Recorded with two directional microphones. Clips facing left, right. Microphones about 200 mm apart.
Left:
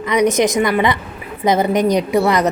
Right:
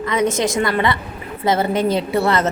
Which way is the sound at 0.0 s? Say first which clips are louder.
Left 4 dB; 20° left (ahead or behind).